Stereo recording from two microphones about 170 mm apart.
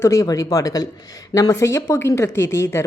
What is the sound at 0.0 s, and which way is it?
A woman's voice, 20° left (ahead or behind).